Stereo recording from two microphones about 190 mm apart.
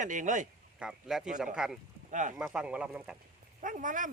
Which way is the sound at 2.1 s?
40° right (ahead or behind).